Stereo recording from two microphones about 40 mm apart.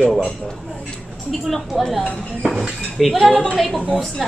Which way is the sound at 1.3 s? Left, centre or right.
Centre.